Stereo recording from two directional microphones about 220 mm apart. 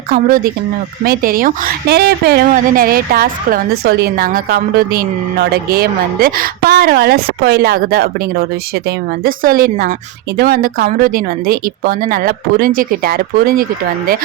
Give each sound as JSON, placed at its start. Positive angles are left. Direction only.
{"t": 0.1, "sound": "a woman's voice", "side_deg": -40}